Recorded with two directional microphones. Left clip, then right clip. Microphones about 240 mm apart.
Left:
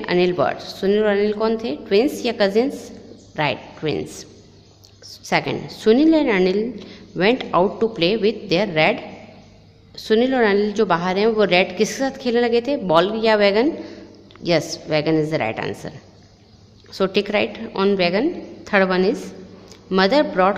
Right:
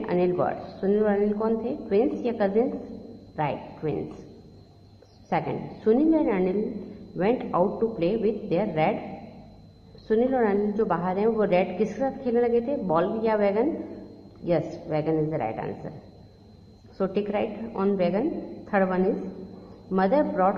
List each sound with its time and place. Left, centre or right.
0.0 s a woman's voice: left
5.3 s a woman's voice: left
10.0 s a woman's voice: left
16.9 s a woman's voice: left